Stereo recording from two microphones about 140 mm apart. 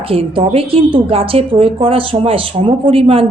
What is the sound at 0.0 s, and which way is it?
A woman's voice, 40° right (ahead or behind).